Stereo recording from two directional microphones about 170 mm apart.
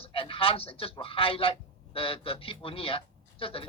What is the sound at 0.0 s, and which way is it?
Speech, 35° left (ahead or behind).